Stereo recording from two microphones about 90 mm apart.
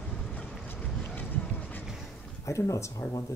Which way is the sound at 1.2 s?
20° left (ahead or behind).